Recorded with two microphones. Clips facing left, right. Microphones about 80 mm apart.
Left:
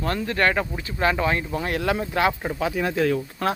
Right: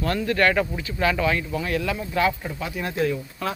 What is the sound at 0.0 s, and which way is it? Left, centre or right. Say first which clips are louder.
Speech: right 1 dB; left.